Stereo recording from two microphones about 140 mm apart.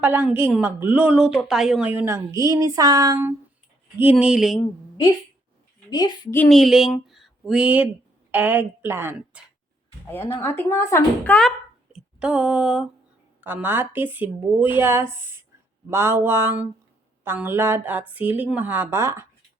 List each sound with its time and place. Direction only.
0.0 s speech: 10° right (ahead or behind)
1.9 s speech: 15° right (ahead or behind)
3.9 s a sound: 10° right (ahead or behind)
6.5 s speech: centre (ahead or behind); by 9.4 s 15° right (ahead or behind)
10.1 s speech: 15° left (ahead or behind)
11.2 s speech: 10° left (ahead or behind)
12.2 s a sound: 5° right (ahead or behind)
13.4 s speech: 15° right (ahead or behind)